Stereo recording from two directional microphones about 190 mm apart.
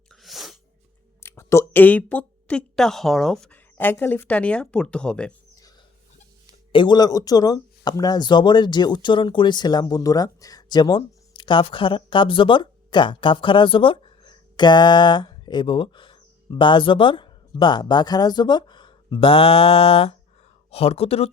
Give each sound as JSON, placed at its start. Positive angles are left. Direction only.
{"t": 0.1, "sound": "sneeze", "side_deg": 0}
{"t": 1.2, "sound": "a woman's voice", "side_deg": 15}
{"t": 6.7, "sound": "speech", "side_deg": 25}